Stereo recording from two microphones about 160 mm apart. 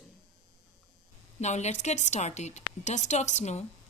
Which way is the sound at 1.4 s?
45° left (ahead or behind).